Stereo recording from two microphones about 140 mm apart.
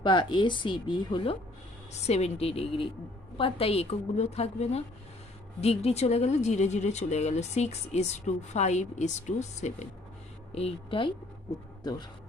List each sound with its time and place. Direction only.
0.0 s speech: 35° left (ahead or behind)
1.9 s speech: 50° left (ahead or behind); by 12.0 s 30° left (ahead or behind)